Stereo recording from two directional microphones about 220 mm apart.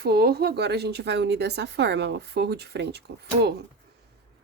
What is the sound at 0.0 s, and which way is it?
Speech, 45° right (ahead or behind).